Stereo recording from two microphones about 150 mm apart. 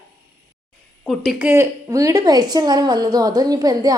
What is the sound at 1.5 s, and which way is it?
A woman's voice, 20° right (ahead or behind).